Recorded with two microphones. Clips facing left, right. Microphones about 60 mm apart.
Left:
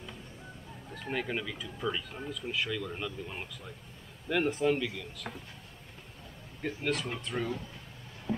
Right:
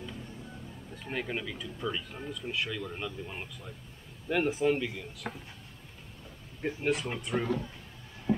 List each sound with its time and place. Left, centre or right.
1.0 s speech: centre
6.6 s speech: centre
8.3 s music: right